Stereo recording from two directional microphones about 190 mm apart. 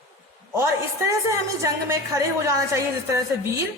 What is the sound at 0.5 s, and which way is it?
A woman's voice, 15° right (ahead or behind).